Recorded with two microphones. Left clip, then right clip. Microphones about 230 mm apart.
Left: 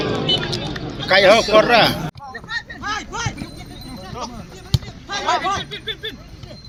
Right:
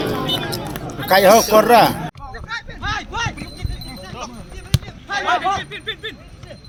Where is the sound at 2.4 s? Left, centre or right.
Centre.